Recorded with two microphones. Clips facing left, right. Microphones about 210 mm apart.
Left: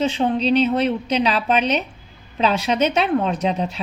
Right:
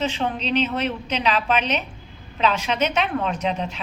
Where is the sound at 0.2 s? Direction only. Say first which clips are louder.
Left 6 dB; 35° left (ahead or behind).